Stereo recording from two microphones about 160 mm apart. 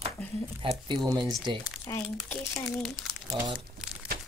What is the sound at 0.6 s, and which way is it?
Speech, 35° right (ahead or behind).